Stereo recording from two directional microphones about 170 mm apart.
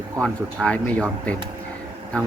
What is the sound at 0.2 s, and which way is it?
Speech, 5° left (ahead or behind).